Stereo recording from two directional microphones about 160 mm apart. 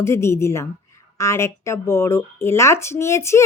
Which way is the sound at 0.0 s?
15° left (ahead or behind).